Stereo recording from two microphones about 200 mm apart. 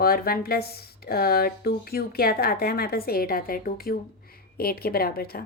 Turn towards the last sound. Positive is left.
turn(degrees=50)  # may be behind; listen again after turning